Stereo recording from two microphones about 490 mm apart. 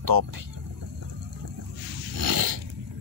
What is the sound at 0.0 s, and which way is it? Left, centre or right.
Speech, right.